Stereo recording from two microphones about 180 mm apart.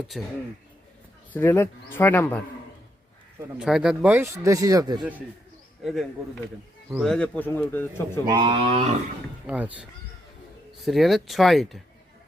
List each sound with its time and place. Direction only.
1.3 s speech: 10° left (ahead or behind)
3.6 s speech: 5° right (ahead or behind); by 5.0 s 20° right (ahead or behind)
5.8 s speech: centre (ahead or behind)
8.3 s speech: 25° right (ahead or behind)
9.5 s speech: 5° right (ahead or behind)
10.8 s speech: centre (ahead or behind)